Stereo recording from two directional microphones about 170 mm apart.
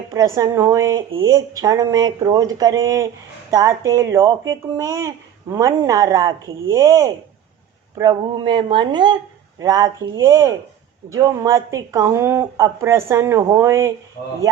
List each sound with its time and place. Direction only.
0.1 s speech: 20° right (ahead or behind)